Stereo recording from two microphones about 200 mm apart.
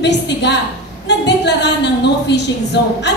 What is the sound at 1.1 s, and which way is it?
A woman's voice, 60° left (ahead or behind).